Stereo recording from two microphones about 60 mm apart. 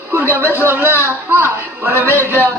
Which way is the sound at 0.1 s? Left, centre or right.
Right.